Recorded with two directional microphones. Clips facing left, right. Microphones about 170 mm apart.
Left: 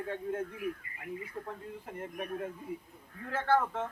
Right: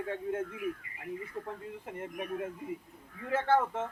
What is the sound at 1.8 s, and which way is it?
Speech, 15° right (ahead or behind).